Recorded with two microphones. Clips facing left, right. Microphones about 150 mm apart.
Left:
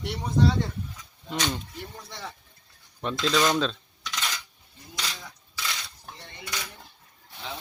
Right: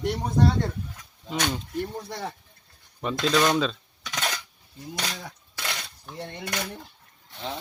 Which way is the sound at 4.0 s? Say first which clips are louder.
Right 4 dB; 50° right (ahead or behind).